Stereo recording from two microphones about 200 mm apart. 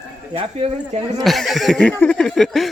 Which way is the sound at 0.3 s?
30° right (ahead or behind).